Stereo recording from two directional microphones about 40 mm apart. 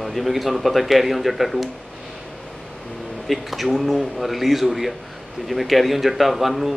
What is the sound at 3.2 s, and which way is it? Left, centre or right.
A man's voice, centre.